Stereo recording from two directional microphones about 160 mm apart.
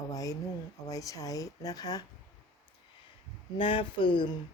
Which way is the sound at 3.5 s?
30° left (ahead or behind).